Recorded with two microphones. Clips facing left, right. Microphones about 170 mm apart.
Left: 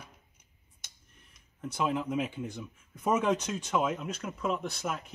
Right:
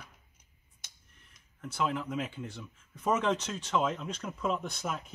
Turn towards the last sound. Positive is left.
turn(degrees=0)  # may be behind; listen again after turning